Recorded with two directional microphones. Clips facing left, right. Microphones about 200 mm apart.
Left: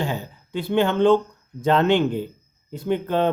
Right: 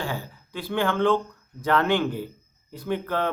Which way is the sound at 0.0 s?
20° left (ahead or behind).